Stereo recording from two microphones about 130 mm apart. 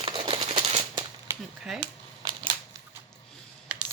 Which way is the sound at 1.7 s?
40° right (ahead or behind).